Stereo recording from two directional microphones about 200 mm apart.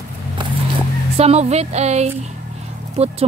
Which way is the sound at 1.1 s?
30° right (ahead or behind).